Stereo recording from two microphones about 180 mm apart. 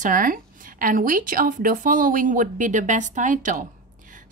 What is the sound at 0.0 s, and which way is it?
A woman's voice, 50° right (ahead or behind).